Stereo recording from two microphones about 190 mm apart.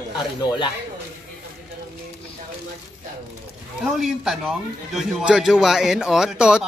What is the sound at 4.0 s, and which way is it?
A man's voice, centre (ahead or behind).